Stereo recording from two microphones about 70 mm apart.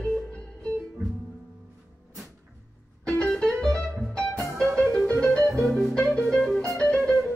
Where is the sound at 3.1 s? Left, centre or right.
Centre.